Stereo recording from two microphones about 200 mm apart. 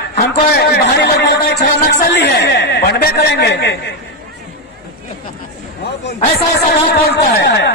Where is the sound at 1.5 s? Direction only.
60° left (ahead or behind).